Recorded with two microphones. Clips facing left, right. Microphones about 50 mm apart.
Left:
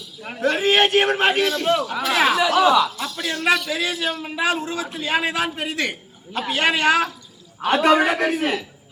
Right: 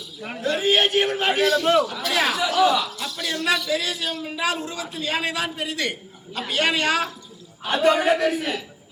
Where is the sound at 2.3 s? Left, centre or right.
Left.